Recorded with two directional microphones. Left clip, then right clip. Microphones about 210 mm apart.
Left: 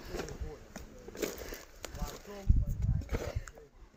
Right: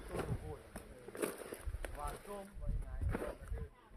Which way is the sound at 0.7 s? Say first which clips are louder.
Left 2 dB; 20° left (ahead or behind).